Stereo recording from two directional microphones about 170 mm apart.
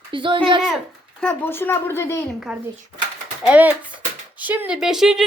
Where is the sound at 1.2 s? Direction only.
10° left (ahead or behind).